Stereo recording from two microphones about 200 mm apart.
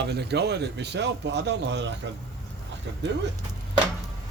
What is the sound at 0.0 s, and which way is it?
A man's voice, 55° right (ahead or behind).